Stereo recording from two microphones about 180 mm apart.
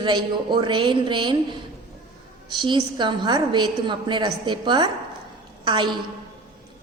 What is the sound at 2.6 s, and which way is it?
Speech, 25° right (ahead or behind).